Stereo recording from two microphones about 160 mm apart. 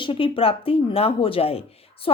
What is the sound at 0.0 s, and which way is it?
A woman's voice, 35° left (ahead or behind).